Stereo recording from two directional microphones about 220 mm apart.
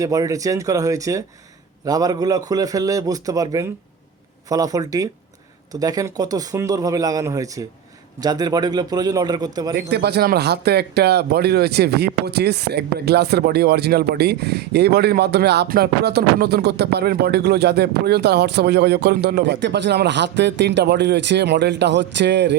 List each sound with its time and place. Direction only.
0.0 s a man's voice: 15° right (ahead or behind)
9.7 s speech: 50° right (ahead or behind)